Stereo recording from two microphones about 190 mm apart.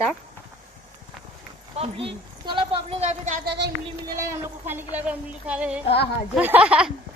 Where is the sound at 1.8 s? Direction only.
30° right (ahead or behind).